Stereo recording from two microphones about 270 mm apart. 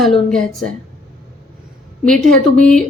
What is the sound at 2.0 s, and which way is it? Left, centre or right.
Speech, centre.